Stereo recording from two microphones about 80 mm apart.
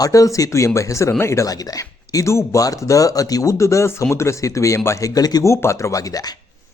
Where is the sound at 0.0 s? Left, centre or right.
Left.